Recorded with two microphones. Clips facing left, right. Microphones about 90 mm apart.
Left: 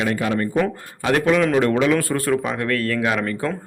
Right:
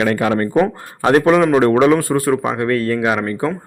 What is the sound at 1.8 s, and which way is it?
Speech, 20° right (ahead or behind).